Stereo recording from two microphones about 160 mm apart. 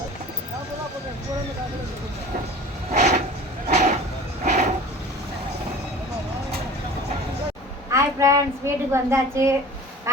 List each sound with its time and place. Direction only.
2.9 s vehicle: 45° right (ahead or behind)
3.7 s a sound: 45° right (ahead or behind)
4.4 s train: 45° right (ahead or behind)
7.9 s a woman's voice: 20° right (ahead or behind)